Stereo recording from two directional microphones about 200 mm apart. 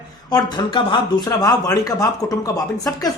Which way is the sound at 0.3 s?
20° left (ahead or behind).